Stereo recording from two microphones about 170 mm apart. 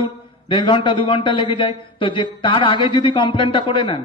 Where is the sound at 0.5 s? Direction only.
30° left (ahead or behind).